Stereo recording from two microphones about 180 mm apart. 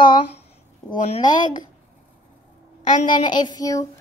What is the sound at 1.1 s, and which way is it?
Speech, 45° left (ahead or behind).